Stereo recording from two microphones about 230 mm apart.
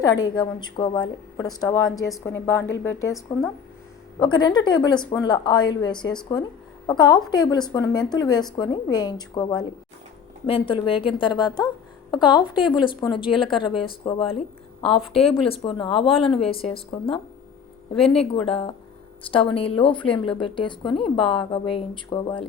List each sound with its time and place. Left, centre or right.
0.0 s a woman's voice: centre
18.0 s a woman's voice: left